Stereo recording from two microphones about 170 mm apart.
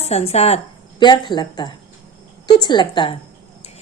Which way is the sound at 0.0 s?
40° left (ahead or behind).